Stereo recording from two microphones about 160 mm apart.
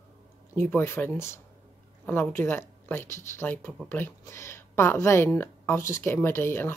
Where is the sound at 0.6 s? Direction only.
10° left (ahead or behind).